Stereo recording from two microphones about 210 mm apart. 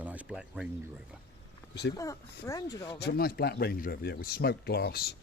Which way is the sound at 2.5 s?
15° left (ahead or behind).